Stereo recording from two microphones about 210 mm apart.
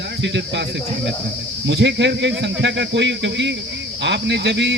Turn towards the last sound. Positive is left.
turn(degrees=-55)  # may be behind; listen again after turning